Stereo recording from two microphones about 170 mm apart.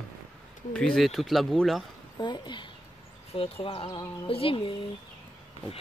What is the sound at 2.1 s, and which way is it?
Speech, 25° left (ahead or behind).